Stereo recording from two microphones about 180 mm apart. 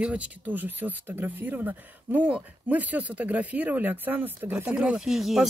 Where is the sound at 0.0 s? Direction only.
5° right (ahead or behind).